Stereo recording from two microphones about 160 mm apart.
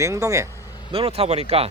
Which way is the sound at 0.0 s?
20° right (ahead or behind).